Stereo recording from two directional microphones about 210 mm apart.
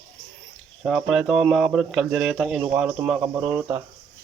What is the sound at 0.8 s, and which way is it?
Speech, centre (ahead or behind).